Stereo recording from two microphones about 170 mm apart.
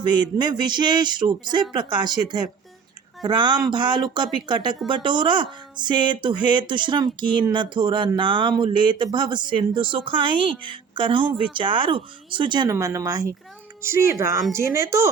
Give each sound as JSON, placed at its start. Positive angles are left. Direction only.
{"t": 0.0, "sound": "speech", "side_deg": -25}
{"t": 12.7, "sound": "speech", "side_deg": -15}